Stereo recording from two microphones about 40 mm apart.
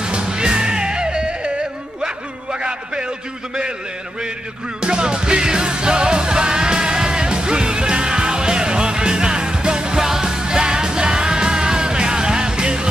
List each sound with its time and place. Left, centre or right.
0.0 s music: right
2.0 s a sound: right
4.8 s music: right